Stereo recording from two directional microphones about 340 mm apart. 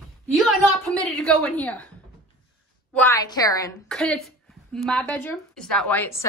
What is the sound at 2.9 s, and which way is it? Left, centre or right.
A woman's voice, centre.